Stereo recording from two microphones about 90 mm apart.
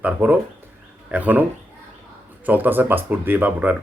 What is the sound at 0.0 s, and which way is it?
Speech, 20° right (ahead or behind).